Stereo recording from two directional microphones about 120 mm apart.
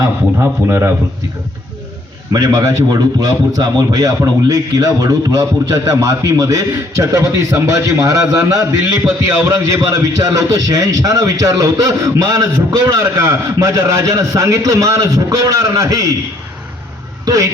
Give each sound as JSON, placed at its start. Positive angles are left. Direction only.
{"t": 2.3, "sound": "a man's voice", "side_deg": -30}
{"t": 17.2, "sound": "speech", "side_deg": -25}